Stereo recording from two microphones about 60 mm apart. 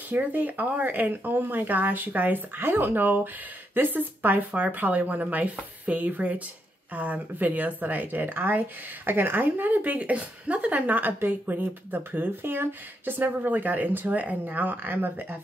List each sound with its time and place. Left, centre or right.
0.1 s speech: right